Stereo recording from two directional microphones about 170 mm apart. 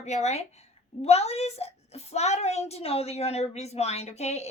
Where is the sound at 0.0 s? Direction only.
40° left (ahead or behind).